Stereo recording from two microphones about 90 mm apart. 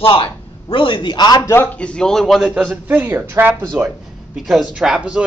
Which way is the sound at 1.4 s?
25° left (ahead or behind).